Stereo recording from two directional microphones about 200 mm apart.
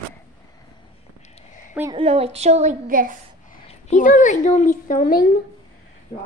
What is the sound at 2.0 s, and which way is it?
A woman's voice, 30° right (ahead or behind).